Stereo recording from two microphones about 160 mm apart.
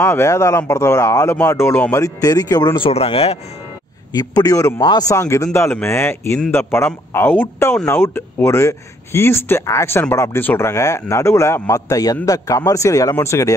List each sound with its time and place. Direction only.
0.0 s speech: 15° left (ahead or behind); by 3.3 s 40° left (ahead or behind)
4.1 s speech: 25° left (ahead or behind)